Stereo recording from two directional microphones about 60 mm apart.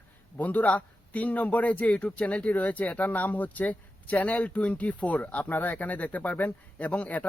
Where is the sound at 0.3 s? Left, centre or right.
Left.